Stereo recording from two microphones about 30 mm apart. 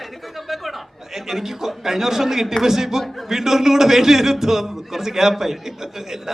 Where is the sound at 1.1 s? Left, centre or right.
Centre.